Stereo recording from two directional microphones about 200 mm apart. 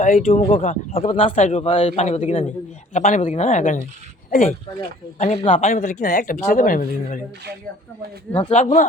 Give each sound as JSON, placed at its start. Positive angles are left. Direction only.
{"t": 0.0, "sound": "speech", "side_deg": 40}
{"t": 8.4, "sound": "speech", "side_deg": 30}